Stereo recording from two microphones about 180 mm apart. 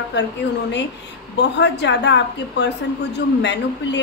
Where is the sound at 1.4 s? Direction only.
75° left (ahead or behind).